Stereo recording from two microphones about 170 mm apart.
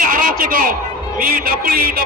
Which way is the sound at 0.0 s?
55° right (ahead or behind).